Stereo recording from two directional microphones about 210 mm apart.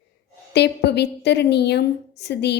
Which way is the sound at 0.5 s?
55° left (ahead or behind).